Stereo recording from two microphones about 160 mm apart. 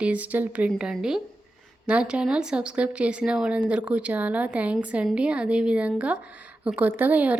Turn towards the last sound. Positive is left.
turn(degrees=-10)  # may be behind; listen again after turning